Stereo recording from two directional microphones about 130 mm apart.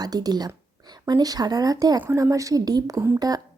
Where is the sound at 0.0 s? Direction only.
30° right (ahead or behind).